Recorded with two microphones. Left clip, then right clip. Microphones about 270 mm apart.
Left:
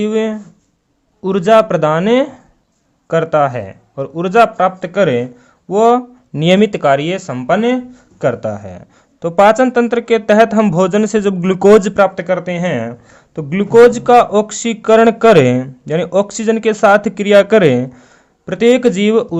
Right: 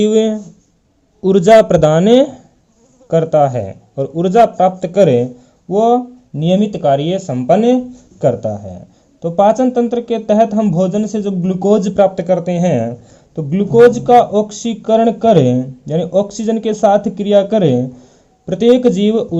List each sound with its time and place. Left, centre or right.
0.0 s speech: centre